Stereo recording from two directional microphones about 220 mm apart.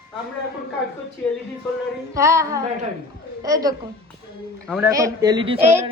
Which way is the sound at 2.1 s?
15° right (ahead or behind).